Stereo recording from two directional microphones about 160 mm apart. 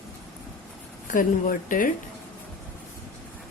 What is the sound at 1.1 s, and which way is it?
Speech, 60° left (ahead or behind).